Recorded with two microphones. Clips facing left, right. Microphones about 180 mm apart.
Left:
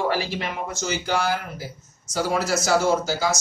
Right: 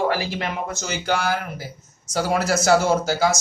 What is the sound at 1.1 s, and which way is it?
Speech, 55° right (ahead or behind).